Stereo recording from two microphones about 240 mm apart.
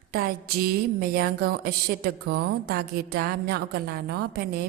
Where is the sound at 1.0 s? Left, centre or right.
Right.